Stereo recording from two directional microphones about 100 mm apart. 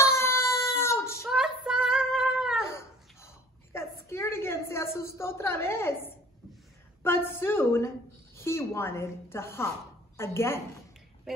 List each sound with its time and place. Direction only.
0.0 s child singing: 25° left (ahead or behind)
1.3 s female singing: 5° right (ahead or behind)
2.7 s a sound: 25° left (ahead or behind)
7.0 s a woman's voice: 25° left (ahead or behind)